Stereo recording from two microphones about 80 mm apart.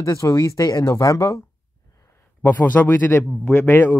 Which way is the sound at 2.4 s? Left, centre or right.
Left.